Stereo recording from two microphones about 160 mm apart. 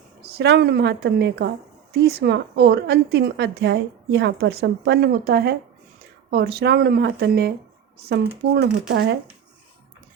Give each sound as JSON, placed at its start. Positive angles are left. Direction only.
{"t": 0.2, "sound": "a woman's voice", "side_deg": -85}
{"t": 1.9, "sound": "a woman's voice", "side_deg": -80}